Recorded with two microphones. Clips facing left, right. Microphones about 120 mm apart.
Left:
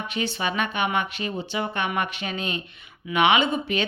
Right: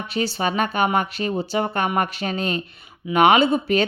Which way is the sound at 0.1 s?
35° right (ahead or behind).